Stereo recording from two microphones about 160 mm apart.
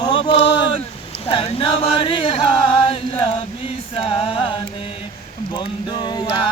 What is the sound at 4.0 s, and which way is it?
Chant, 35° left (ahead or behind).